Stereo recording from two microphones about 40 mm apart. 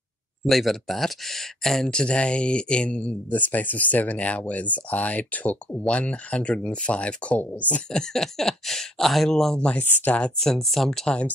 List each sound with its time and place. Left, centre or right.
0.5 s speech: centre
1.9 s speech: left
3.3 s speech: left
7.9 s speech: centre
9.8 s speech: left
10.4 s speech: centre